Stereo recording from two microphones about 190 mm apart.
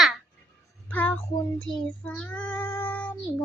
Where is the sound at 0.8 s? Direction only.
10° left (ahead or behind).